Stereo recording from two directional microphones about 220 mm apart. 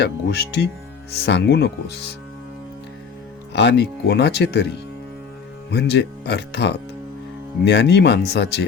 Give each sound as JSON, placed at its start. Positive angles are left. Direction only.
{"t": 0.0, "sound": "speech", "side_deg": 50}
{"t": 3.5, "sound": "speech", "side_deg": 50}